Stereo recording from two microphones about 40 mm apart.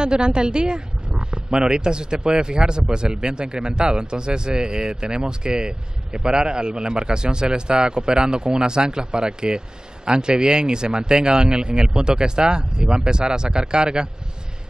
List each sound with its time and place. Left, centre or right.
0.0 s speech: right